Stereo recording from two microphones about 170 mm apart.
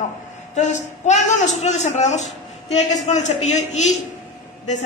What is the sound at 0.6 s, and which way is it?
A man's voice, 45° left (ahead or behind).